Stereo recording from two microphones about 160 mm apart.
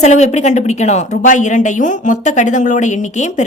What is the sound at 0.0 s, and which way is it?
A woman's voice, 45° left (ahead or behind).